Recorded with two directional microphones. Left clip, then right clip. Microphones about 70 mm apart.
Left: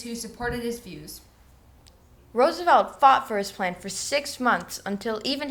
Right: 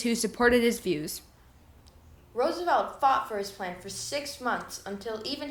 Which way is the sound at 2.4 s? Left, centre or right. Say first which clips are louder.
Left 7 dB; left.